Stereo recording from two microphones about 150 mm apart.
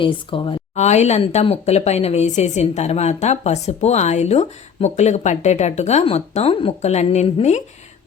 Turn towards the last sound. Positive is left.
turn(degrees=50)  # may be behind; listen again after turning